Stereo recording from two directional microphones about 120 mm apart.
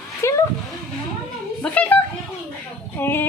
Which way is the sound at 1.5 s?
15° left (ahead or behind).